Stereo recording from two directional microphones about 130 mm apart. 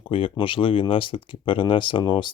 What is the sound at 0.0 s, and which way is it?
Speech, 45° left (ahead or behind).